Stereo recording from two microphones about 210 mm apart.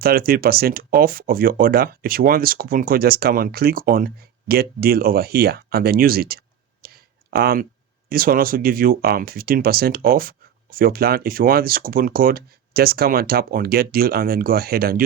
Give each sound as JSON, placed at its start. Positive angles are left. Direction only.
{"t": 0.0, "sound": "speech", "side_deg": -45}
{"t": 6.8, "sound": "a sound", "side_deg": -45}
{"t": 8.1, "sound": "speech", "side_deg": -45}